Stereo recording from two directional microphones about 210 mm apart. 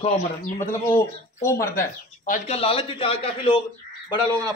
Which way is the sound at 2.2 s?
35° left (ahead or behind).